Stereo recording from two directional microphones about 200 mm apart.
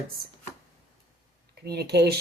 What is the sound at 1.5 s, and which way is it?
Speech, 55° right (ahead or behind).